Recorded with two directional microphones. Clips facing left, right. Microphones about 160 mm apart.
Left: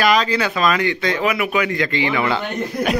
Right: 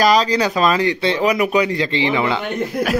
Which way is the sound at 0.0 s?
35° right (ahead or behind).